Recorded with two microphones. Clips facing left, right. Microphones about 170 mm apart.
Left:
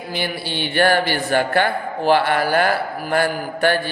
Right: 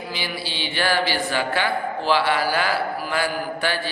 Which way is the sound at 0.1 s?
55° left (ahead or behind).